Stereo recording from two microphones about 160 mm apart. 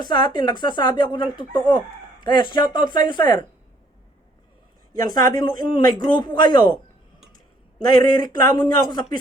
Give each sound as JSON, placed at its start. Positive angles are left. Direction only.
{"t": 0.0, "sound": "speech", "side_deg": 30}
{"t": 4.9, "sound": "speech", "side_deg": 25}
{"t": 7.9, "sound": "speech", "side_deg": 25}